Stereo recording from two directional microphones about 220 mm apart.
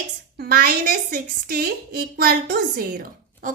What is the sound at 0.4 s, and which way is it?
A woman's voice, 45° right (ahead or behind).